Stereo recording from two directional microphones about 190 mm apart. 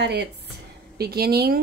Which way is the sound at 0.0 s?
60° right (ahead or behind).